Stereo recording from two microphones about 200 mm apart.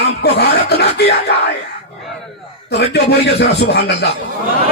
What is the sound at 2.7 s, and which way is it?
A man's voice, 55° left (ahead or behind).